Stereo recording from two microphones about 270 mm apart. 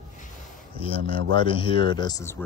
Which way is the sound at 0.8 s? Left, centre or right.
Centre.